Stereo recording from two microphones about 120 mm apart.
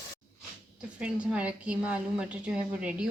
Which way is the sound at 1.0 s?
10° right (ahead or behind).